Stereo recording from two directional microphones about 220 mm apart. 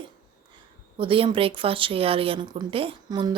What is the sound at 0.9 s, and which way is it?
Speech, 25° right (ahead or behind).